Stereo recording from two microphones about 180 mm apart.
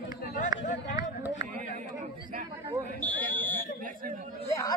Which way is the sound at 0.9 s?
20° right (ahead or behind).